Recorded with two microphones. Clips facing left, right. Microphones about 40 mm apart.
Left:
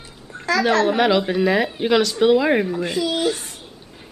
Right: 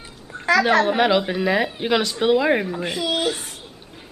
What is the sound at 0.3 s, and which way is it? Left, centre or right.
Speech, right.